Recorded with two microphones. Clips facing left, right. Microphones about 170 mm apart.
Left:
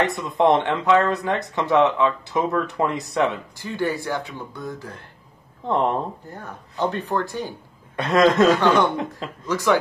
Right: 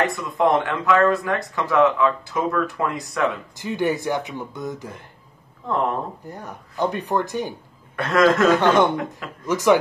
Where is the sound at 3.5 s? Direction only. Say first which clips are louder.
Right 2 dB; 20° right (ahead or behind).